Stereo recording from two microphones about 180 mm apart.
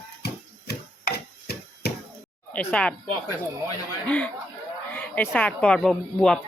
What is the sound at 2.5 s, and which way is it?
Speech, 10° left (ahead or behind).